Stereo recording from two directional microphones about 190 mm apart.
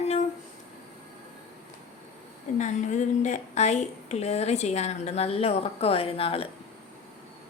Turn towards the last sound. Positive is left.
turn(degrees=30)  # may be behind; listen again after turning